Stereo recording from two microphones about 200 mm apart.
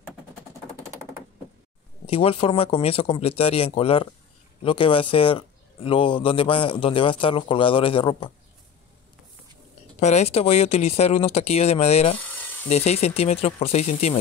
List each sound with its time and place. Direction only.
2.0 s speech: 30° left (ahead or behind)
9.9 s speech: 35° left (ahead or behind)